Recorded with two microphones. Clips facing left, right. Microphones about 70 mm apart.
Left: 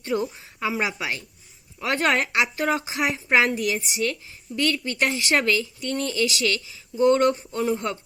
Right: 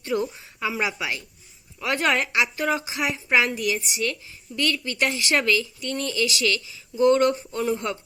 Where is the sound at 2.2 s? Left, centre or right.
Left.